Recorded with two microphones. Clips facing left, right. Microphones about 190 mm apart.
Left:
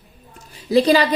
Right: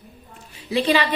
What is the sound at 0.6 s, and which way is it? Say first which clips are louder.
Speech: left 5 dB; 40° left (ahead or behind).